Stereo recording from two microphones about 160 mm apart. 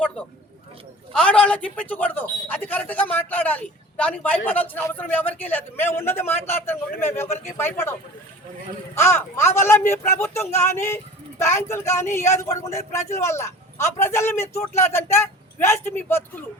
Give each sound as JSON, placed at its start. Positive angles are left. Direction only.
{"t": 1.1, "sound": "a man's voice", "side_deg": 5}
{"t": 9.0, "sound": "a man's voice", "side_deg": 15}